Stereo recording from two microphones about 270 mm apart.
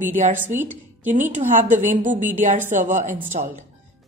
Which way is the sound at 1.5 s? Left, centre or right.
Right.